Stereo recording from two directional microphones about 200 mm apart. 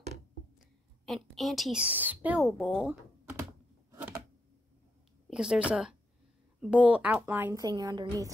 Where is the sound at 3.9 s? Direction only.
10° right (ahead or behind).